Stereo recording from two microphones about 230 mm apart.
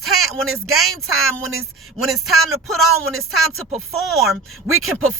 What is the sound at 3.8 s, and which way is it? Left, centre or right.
Speech, centre.